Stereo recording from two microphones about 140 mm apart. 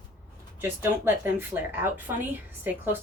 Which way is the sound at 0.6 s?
15° right (ahead or behind).